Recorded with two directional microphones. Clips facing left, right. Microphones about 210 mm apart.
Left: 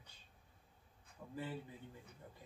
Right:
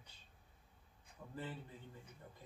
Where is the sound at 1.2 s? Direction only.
10° left (ahead or behind).